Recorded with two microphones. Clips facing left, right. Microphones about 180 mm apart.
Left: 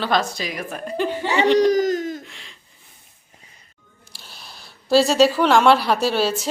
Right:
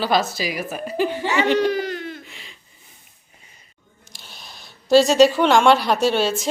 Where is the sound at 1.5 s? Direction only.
40° left (ahead or behind).